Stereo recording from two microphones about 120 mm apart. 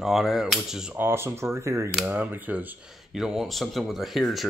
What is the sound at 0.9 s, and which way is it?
Speech, 20° right (ahead or behind).